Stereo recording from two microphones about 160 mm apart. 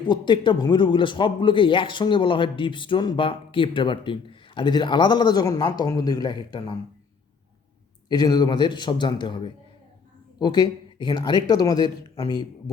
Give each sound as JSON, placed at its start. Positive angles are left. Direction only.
{"t": 0.0, "sound": "speech", "side_deg": 30}
{"t": 8.1, "sound": "speech", "side_deg": 25}